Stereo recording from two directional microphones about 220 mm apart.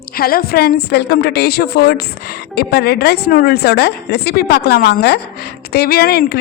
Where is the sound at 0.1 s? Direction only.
45° left (ahead or behind).